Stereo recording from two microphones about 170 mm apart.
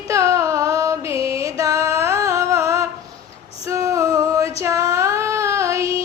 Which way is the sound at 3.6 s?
20° right (ahead or behind).